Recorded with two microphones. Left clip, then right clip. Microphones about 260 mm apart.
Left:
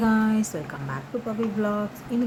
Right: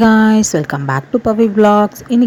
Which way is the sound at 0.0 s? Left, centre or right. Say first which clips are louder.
Right 13 dB; right.